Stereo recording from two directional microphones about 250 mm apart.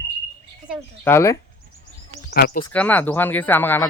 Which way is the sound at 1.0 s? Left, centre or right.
Centre.